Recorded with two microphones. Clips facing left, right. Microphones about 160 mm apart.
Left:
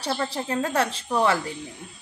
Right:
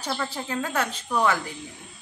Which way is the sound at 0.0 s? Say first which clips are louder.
Left 3 dB; 35° left (ahead or behind).